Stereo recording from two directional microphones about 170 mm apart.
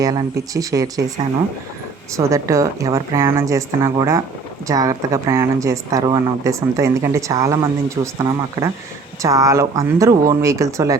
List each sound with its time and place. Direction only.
0.0 s a woman's voice: 20° right (ahead or behind)